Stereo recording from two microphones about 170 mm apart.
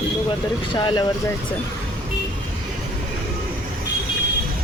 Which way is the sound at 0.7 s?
30° left (ahead or behind).